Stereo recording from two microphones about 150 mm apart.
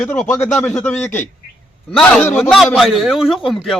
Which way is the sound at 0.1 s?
15° left (ahead or behind).